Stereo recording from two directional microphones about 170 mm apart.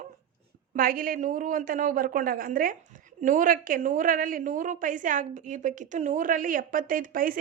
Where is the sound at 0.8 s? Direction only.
55° right (ahead or behind).